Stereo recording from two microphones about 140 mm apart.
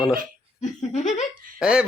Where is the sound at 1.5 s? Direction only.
5° right (ahead or behind).